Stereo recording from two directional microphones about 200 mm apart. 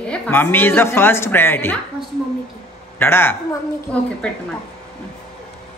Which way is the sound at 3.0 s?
10° left (ahead or behind).